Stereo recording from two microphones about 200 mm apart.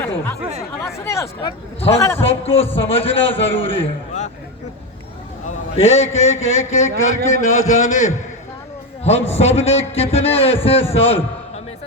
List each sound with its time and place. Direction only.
0.8 s speech: 15° left (ahead or behind)
1.4 s a man's voice: 25° left (ahead or behind)
2.4 s a man's voice: 30° left (ahead or behind)
5.7 s a man's voice: 30° left (ahead or behind)
6.3 s a sound: 75° left (ahead or behind)
6.7 s a man's voice: 35° left (ahead or behind)